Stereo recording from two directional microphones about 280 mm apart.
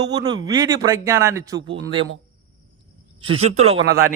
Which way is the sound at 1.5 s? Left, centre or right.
Right.